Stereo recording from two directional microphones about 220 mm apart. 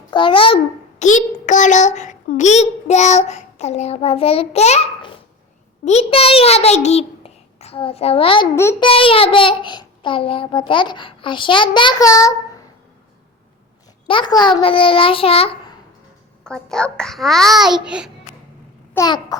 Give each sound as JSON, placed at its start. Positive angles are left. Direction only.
{"t": 0.1, "sound": "a child's voice", "side_deg": 20}
{"t": 8.5, "sound": "babbling", "side_deg": 10}
{"t": 8.9, "sound": "a child's voice", "side_deg": 25}
{"t": 14.1, "sound": "a child's voice", "side_deg": 20}
{"t": 16.4, "sound": "a child's voice", "side_deg": 5}
{"t": 18.9, "sound": "babbling", "side_deg": 15}